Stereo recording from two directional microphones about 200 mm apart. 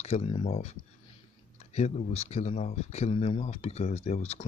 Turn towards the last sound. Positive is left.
turn(degrees=35)  # may be behind; listen again after turning